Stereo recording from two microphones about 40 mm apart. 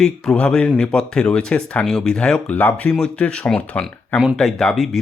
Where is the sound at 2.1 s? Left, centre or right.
Left.